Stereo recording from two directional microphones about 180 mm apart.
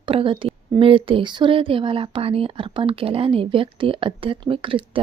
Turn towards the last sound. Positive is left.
turn(degrees=-30)  # may be behind; listen again after turning